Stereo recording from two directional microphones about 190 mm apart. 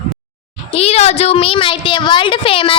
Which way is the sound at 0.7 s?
35° left (ahead or behind).